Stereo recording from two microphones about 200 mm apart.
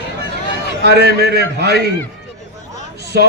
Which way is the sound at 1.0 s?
55° right (ahead or behind).